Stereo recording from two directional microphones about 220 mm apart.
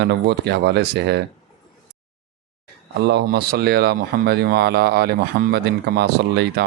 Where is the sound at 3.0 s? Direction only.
50° right (ahead or behind).